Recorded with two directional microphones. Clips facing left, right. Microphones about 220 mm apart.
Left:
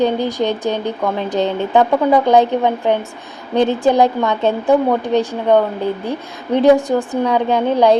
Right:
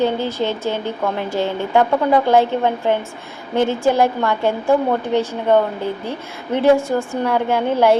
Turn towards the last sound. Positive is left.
turn(degrees=15)  # may be behind; listen again after turning